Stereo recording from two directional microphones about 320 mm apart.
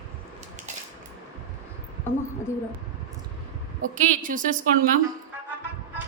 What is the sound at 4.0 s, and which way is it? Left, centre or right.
Speech, right.